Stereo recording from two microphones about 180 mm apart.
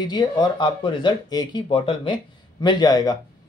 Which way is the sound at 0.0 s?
25° left (ahead or behind).